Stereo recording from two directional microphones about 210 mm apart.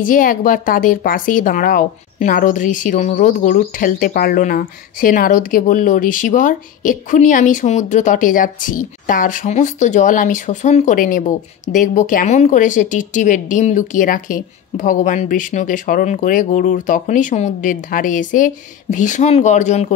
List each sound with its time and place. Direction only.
0.0 s speech: 40° left (ahead or behind)